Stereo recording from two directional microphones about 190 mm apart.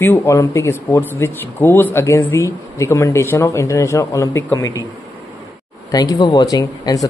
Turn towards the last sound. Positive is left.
turn(degrees=20)  # may be behind; listen again after turning